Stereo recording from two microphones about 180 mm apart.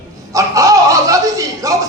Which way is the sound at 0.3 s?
20° right (ahead or behind).